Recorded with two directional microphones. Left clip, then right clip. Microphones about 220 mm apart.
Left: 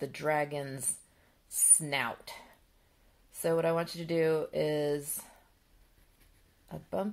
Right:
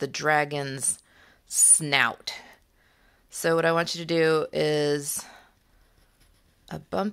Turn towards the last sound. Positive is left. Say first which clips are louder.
# right 6 dB
turn(degrees=-35)  # may be behind; listen again after turning